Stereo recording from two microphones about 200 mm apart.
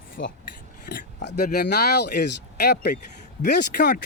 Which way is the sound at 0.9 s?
55° left (ahead or behind).